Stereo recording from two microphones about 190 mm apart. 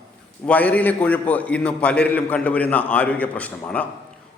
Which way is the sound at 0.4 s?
5° left (ahead or behind).